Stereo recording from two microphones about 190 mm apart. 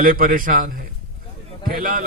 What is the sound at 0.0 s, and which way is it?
Speech, 50° right (ahead or behind).